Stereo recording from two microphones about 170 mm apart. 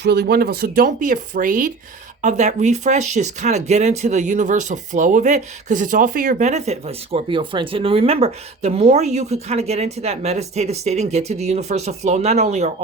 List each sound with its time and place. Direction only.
0.0 s speech: 70° right (ahead or behind); by 12.7 s 40° right (ahead or behind)